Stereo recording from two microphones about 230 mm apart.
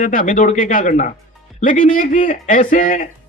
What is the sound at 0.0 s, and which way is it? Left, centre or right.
Speech, left.